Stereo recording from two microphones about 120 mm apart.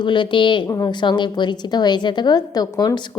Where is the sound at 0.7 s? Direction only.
30° left (ahead or behind).